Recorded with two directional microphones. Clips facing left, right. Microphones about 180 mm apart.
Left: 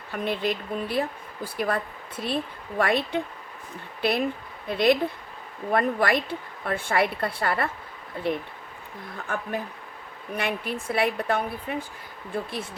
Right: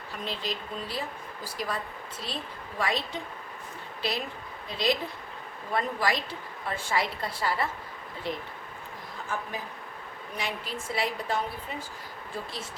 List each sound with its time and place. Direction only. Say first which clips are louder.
0.1 s a woman's voice: left 8 dB; 55° left (ahead or behind)